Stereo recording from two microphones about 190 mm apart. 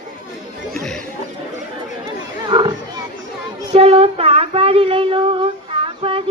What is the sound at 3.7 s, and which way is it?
Child singing, 30° right (ahead or behind).